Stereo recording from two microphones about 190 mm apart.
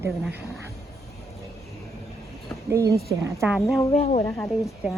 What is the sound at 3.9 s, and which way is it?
Speech, 35° left (ahead or behind).